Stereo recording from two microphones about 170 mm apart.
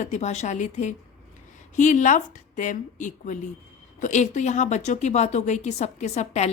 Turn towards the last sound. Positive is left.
turn(degrees=40)  # may be behind; listen again after turning